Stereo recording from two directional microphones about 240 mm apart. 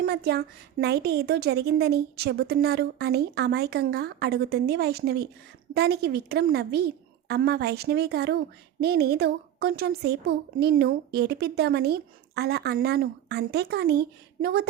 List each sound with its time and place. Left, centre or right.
0.0 s a woman's voice: right